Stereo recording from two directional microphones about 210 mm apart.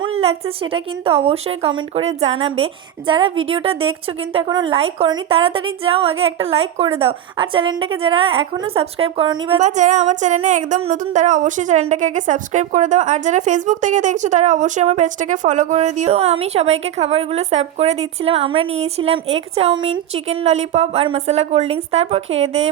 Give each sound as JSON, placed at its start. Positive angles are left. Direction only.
{"t": 0.0, "sound": "a woman's voice", "side_deg": -30}
{"t": 9.6, "sound": "a sound", "side_deg": -35}
{"t": 20.1, "sound": "a woman's voice", "side_deg": -30}